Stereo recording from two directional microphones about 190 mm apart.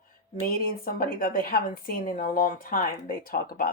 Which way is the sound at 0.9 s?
45° left (ahead or behind).